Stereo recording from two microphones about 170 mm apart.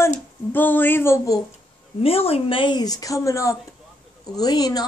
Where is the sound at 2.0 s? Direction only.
35° left (ahead or behind).